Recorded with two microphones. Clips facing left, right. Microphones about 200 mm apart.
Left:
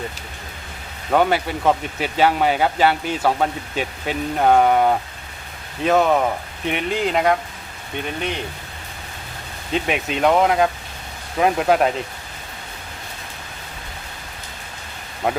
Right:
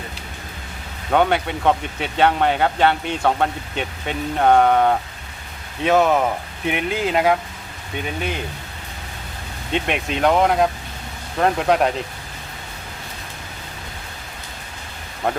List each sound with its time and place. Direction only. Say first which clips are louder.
1.1 s speech: even; centre (ahead or behind)
9.7 s speech: even; centre (ahead or behind)